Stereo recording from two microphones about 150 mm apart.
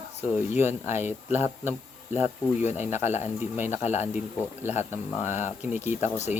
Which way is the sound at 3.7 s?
50° left (ahead or behind).